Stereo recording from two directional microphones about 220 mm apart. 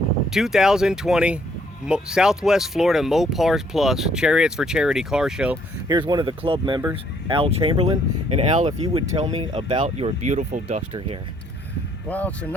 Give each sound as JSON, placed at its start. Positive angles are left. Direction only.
{"t": 0.3, "sound": "speech", "side_deg": 0}
{"t": 5.9, "sound": "speech", "side_deg": -20}
{"t": 9.8, "sound": "speech", "side_deg": -30}
{"t": 12.0, "sound": "speech", "side_deg": 5}